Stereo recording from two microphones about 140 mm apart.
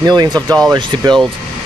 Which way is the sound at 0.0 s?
30° right (ahead or behind).